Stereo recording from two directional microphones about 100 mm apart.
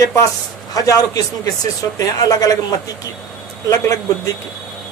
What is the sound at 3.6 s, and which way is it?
Speech, 35° left (ahead or behind).